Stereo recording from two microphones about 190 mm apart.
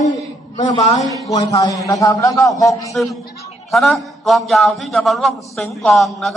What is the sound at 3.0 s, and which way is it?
A man's voice, 5° left (ahead or behind).